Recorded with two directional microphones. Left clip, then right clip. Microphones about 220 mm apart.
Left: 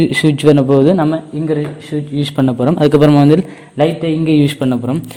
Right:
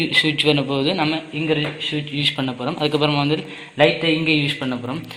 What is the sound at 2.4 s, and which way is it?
A man's voice, 45° left (ahead or behind).